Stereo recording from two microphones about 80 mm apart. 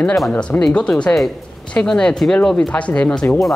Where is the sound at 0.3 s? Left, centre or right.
Centre.